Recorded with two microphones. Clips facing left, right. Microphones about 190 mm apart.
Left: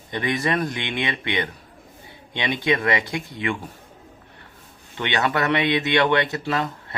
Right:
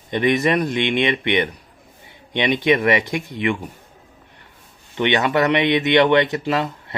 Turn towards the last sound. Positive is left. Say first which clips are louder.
# right 3 dB
turn(degrees=-20)  # may be behind; listen again after turning